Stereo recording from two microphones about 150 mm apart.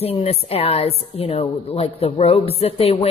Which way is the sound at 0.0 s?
40° left (ahead or behind).